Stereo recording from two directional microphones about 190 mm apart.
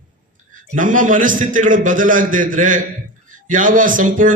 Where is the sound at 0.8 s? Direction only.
45° right (ahead or behind).